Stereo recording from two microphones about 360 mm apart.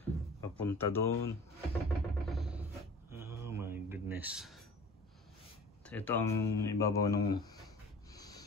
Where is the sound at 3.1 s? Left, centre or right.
Centre.